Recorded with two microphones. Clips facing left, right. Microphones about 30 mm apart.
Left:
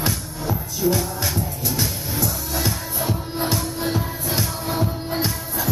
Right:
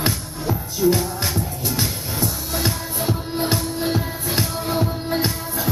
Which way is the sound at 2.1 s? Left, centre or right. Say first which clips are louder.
Even; right.